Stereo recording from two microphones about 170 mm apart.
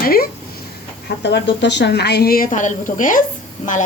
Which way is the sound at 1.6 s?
90° left.